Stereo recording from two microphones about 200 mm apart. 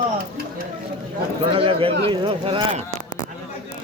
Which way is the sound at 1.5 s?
25° right (ahead or behind).